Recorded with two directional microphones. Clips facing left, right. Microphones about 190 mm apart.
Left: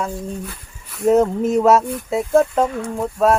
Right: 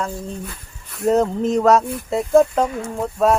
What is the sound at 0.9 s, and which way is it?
Speech, 5° left (ahead or behind).